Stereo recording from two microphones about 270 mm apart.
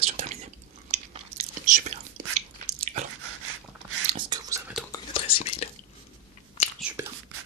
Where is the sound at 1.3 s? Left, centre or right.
Right.